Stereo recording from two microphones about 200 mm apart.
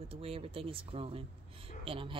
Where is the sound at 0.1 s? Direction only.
30° right (ahead or behind).